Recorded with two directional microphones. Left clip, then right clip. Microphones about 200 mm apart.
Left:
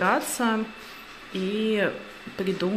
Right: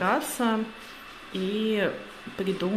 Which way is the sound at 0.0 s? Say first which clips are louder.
Left 2 dB; centre (ahead or behind).